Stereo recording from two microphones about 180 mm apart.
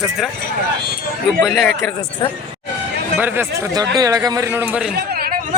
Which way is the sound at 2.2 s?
25° left (ahead or behind).